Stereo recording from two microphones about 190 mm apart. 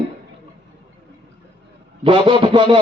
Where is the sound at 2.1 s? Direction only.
25° right (ahead or behind).